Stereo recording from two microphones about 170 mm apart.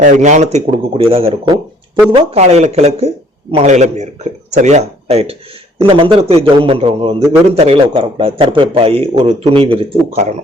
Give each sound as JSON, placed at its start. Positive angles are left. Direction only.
{"t": 0.0, "sound": "a man's voice", "side_deg": -45}